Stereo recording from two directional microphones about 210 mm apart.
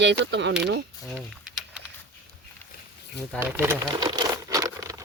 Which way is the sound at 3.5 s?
10° right (ahead or behind).